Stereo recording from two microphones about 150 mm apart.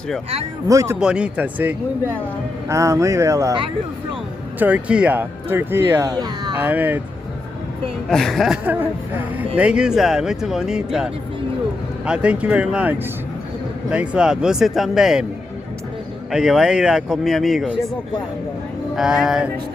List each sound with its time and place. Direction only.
0.7 s speech: 20° right (ahead or behind)
0.9 s speech: 5° right (ahead or behind)
4.6 s speech: 10° right (ahead or behind)
6.1 s speech: 25° right (ahead or behind)
6.6 s speech: 10° right (ahead or behind)
8.1 s speech: centre (ahead or behind)
8.6 s speech: 10° right (ahead or behind)
16.3 s speech: 5° right (ahead or behind)
18.9 s speech: 5° right (ahead or behind)